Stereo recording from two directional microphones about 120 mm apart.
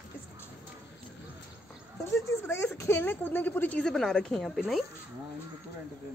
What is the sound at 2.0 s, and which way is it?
A woman's voice, 20° left (ahead or behind).